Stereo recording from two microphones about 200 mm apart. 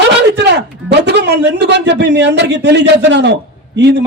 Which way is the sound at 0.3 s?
60° right (ahead or behind).